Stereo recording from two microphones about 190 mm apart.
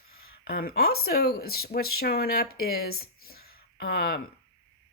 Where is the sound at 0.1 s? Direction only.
55° left (ahead or behind).